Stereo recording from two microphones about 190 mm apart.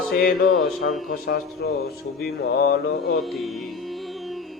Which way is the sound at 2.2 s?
55° left (ahead or behind).